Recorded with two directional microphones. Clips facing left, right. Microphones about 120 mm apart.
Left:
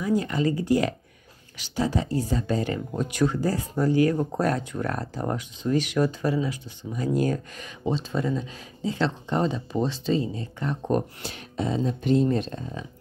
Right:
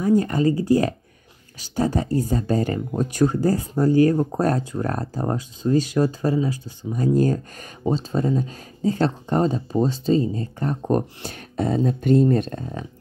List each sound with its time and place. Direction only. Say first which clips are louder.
0.0 s speech: right 5 dB; 45° right (ahead or behind)
1.6 s speech: right 3 dB; 45° right (ahead or behind)